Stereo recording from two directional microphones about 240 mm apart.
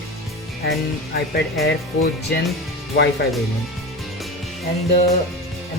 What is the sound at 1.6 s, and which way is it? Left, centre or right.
Speech, left.